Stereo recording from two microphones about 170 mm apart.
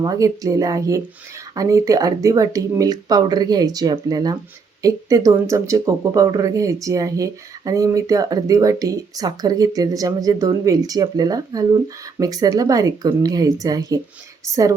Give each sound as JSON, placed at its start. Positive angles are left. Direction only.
{"t": 0.0, "sound": "a woman's voice", "side_deg": -20}